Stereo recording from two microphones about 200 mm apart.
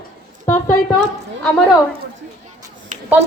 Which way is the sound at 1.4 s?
5° left (ahead or behind).